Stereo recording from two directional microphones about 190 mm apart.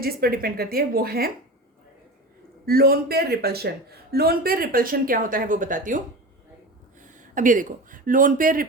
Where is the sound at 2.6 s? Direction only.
50° right (ahead or behind).